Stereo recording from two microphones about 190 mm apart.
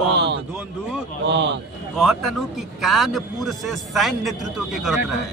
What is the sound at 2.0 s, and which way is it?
A man's voice, centre (ahead or behind).